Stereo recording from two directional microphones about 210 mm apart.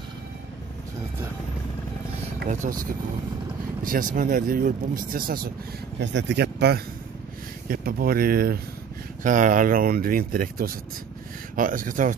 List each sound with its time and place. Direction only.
2.6 s speech: 40° right (ahead or behind)
3.8 s speech: 40° right (ahead or behind)
5.9 s speech: 55° right (ahead or behind); by 12.2 s 40° right (ahead or behind)